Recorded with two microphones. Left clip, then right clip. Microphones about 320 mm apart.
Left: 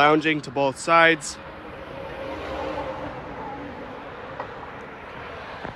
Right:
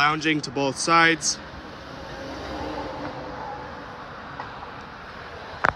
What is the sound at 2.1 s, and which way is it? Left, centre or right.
Vehicle, right.